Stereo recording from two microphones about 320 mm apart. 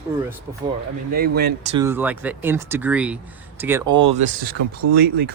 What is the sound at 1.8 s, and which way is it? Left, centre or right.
Speech, centre.